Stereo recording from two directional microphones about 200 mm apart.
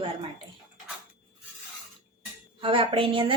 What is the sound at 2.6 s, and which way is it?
Speech, 25° right (ahead or behind).